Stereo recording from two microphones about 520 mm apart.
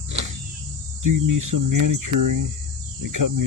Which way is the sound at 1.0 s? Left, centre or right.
Right.